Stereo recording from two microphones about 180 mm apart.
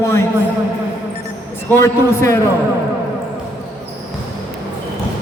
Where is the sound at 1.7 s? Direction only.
15° left (ahead or behind).